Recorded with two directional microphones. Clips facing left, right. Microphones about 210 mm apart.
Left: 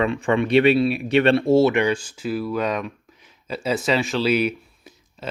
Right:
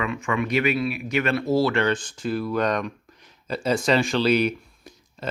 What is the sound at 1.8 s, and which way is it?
Speech, 10° left (ahead or behind).